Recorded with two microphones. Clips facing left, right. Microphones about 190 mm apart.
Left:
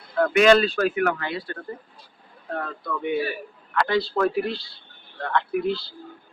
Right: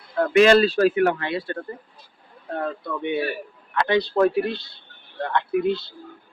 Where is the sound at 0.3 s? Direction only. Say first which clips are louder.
Right 2 dB; 35° right (ahead or behind).